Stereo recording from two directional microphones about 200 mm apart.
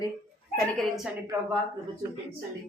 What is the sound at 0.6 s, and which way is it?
Speech, centre (ahead or behind).